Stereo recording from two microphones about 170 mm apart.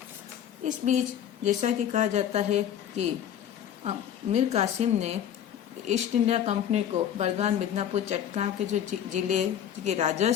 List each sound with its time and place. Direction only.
0.6 s a woman's voice: 45° right (ahead or behind)